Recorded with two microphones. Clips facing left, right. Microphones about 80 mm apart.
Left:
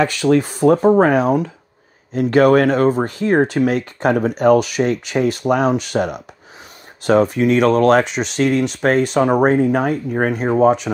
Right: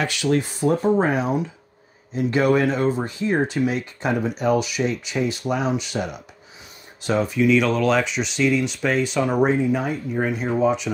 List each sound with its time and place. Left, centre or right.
0.0 s speech: left
1.0 s speech: left